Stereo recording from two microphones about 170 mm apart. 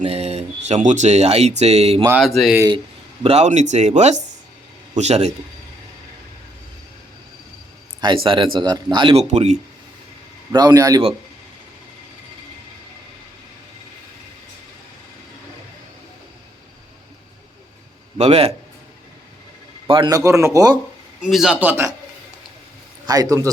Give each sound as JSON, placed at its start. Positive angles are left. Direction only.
{"t": 0.0, "sound": "speech", "side_deg": -40}
{"t": 2.0, "sound": "speech", "side_deg": -5}
{"t": 3.2, "sound": "speech", "side_deg": -40}
{"t": 8.0, "sound": "speech", "side_deg": -30}
{"t": 9.2, "sound": "speech", "side_deg": -40}
{"t": 10.5, "sound": "speech", "side_deg": -25}
{"t": 18.2, "sound": "speech", "side_deg": -40}
{"t": 19.9, "sound": "speech", "side_deg": -25}
{"t": 21.2, "sound": "a man's voice", "side_deg": 0}
{"t": 23.0, "sound": "speech", "side_deg": -20}